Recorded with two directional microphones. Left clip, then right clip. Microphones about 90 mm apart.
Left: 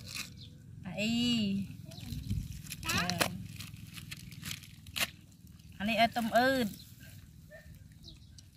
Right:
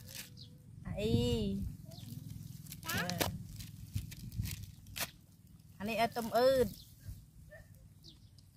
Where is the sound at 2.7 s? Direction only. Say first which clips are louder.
Left 5 dB; 40° right (ahead or behind).